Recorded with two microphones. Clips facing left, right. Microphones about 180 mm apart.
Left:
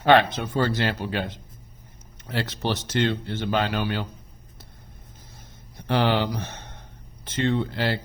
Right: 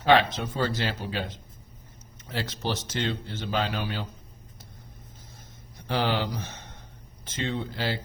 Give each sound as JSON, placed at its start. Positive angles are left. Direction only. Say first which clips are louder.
{"t": 0.0, "sound": "speech", "louder": "left 3 dB", "side_deg": 60}
{"t": 2.3, "sound": "speech", "louder": "left 4 dB", "side_deg": 65}
{"t": 5.9, "sound": "speech", "louder": "left 4 dB", "side_deg": 65}